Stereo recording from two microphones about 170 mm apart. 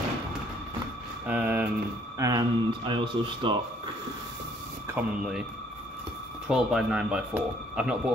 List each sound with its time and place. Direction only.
1.2 s a sound: 10° right (ahead or behind)
2.1 s speech: 20° right (ahead or behind)
4.8 s speech: 10° right (ahead or behind)
6.4 s speech: 5° right (ahead or behind)